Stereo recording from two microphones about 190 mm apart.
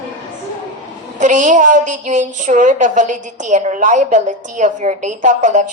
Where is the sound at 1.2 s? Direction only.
40° right (ahead or behind).